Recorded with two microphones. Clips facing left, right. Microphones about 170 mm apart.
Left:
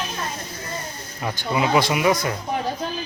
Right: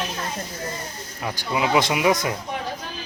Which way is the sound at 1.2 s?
5° right (ahead or behind).